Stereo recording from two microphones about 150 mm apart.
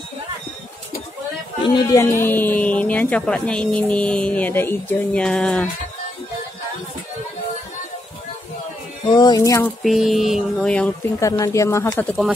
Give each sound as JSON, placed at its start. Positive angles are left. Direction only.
{"t": 1.8, "sound": "speech", "side_deg": 25}
{"t": 9.1, "sound": "speech", "side_deg": 25}
{"t": 9.8, "sound": "mantra", "side_deg": 0}
{"t": 11.1, "sound": "speech", "side_deg": 20}